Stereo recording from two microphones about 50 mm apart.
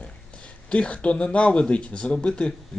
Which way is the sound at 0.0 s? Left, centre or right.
Left.